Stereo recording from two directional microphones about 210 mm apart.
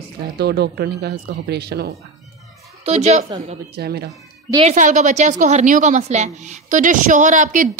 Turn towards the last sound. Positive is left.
turn(degrees=-40)  # may be behind; listen again after turning